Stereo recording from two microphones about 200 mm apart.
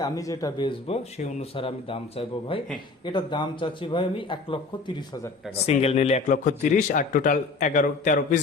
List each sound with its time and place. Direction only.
0.0 s a man's voice: 15° left (ahead or behind); by 8.4 s 40° left (ahead or behind)